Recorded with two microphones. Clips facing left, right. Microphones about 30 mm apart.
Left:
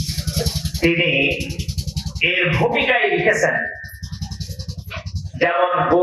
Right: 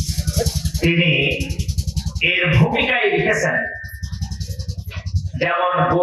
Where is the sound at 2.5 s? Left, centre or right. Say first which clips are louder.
Even; left.